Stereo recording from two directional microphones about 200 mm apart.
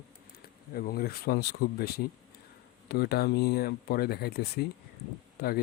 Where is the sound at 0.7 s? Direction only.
50° left (ahead or behind).